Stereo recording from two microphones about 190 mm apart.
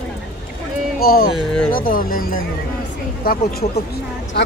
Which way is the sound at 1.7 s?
45° left (ahead or behind).